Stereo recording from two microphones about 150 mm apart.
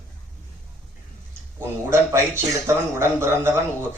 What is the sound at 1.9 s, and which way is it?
Speech, 15° right (ahead or behind).